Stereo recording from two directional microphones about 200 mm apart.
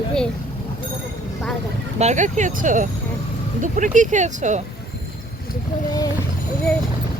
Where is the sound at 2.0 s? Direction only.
35° right (ahead or behind).